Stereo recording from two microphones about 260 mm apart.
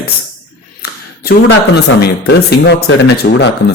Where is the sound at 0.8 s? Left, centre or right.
Left.